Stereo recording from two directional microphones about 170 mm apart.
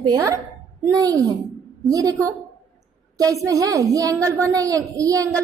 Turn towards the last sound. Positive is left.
turn(degrees=-20)  # may be behind; listen again after turning